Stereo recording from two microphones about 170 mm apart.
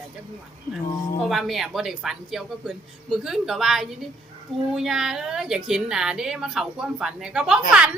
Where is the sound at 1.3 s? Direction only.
Centre (ahead or behind).